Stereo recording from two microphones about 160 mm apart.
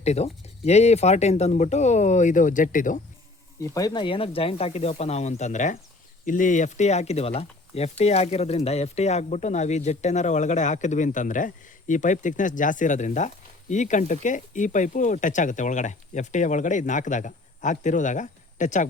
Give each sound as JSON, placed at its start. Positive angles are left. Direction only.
{"t": 0.0, "sound": "speech", "side_deg": 40}
{"t": 3.6, "sound": "speech", "side_deg": 25}